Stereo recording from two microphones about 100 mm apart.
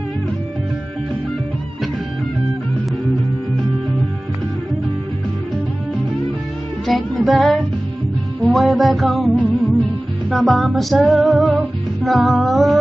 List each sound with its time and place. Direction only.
6.9 s music: centre (ahead or behind)